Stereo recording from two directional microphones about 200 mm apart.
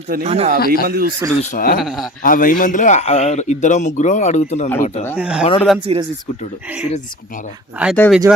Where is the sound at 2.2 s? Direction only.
45° left (ahead or behind).